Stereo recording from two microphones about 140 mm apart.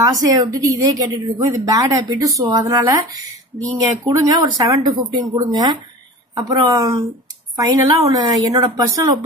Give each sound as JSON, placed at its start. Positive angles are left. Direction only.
{"t": 0.1, "sound": "a woman's voice", "side_deg": -25}